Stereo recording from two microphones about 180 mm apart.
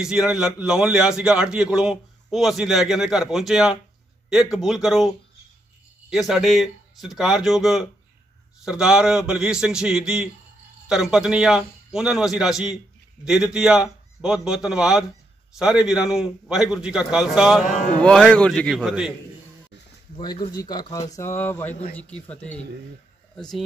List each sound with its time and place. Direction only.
0.0 s a man's voice: 5° right (ahead or behind)
20.2 s speech: 25° left (ahead or behind); by 23.6 s centre (ahead or behind)